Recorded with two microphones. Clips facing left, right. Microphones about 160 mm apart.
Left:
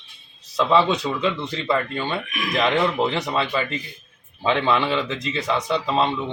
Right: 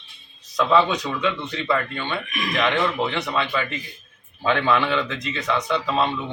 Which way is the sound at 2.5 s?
35° left (ahead or behind).